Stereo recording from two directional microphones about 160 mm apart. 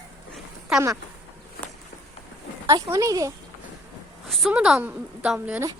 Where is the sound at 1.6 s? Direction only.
70° left (ahead or behind).